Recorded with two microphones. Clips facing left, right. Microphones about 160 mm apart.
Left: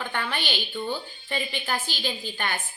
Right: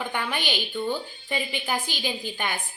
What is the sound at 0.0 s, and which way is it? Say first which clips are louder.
A woman's voice: right 1 dB; 10° right (ahead or behind).